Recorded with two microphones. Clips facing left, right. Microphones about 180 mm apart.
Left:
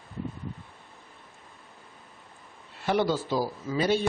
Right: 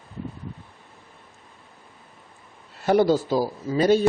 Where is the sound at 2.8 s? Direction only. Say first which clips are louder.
Right 7 dB; 40° right (ahead or behind).